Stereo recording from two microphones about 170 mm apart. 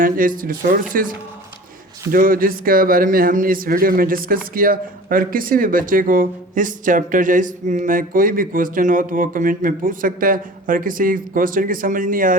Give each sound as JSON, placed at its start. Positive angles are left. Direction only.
{"t": 0.0, "sound": "a man's voice", "side_deg": -55}
{"t": 2.1, "sound": "a man's voice", "side_deg": -55}